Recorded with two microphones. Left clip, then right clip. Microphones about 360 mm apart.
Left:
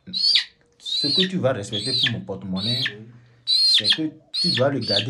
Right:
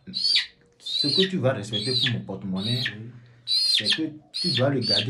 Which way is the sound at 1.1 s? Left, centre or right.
Left.